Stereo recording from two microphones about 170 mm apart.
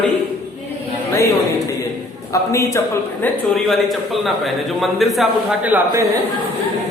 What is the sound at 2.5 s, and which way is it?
Speech, 15° left (ahead or behind).